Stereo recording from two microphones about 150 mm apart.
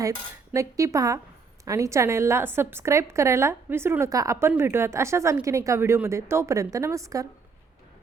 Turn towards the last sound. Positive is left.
turn(degrees=-20)  # may be behind; listen again after turning